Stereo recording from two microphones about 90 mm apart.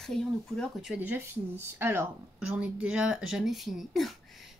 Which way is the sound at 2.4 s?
10° right (ahead or behind).